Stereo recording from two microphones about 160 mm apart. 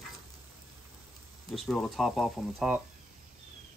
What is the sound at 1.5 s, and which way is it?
Speech, centre (ahead or behind).